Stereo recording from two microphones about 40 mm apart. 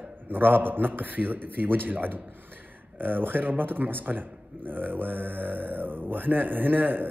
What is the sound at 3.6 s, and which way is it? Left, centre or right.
Mantra, right.